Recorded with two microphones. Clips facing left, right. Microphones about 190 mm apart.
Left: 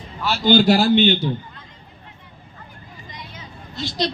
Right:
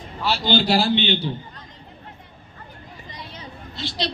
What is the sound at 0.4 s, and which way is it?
Speech, 50° left (ahead or behind).